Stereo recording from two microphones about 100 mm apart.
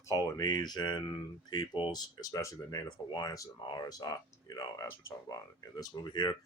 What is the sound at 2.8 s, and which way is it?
Speech, 45° left (ahead or behind).